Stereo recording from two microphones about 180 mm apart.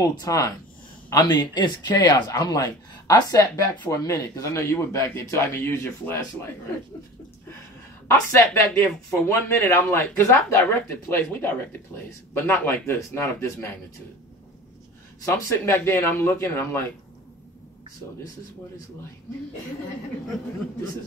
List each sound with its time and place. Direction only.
0.0 s speech: 20° left (ahead or behind)
8.1 s speech: 15° left (ahead or behind)
15.2 s speech: 15° left (ahead or behind)